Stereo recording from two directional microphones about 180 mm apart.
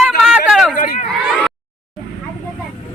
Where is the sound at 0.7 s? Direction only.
45° left (ahead or behind).